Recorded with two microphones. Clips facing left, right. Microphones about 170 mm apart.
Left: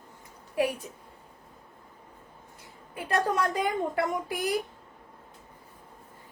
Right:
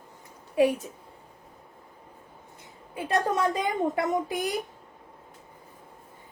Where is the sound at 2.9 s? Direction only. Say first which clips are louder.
Right 1 dB; 25° right (ahead or behind).